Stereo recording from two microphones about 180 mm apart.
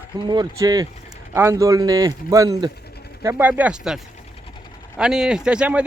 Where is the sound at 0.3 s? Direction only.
20° right (ahead or behind).